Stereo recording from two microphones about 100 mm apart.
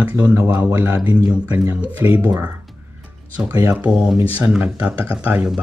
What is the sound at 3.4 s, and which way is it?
Speech, 30° right (ahead or behind).